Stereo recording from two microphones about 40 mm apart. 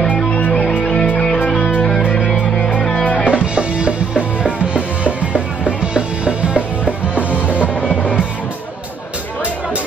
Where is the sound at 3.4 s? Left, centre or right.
Right.